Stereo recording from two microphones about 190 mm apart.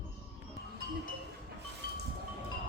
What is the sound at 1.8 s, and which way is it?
Music, 50° left (ahead or behind).